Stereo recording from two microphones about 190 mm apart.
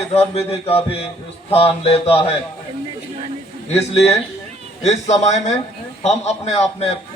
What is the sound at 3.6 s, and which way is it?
A man's voice, 35° left (ahead or behind).